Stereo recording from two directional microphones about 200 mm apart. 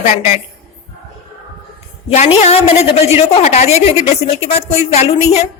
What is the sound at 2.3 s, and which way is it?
A woman's voice, 30° left (ahead or behind).